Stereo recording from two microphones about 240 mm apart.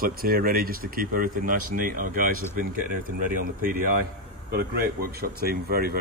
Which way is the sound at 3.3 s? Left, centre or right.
Right.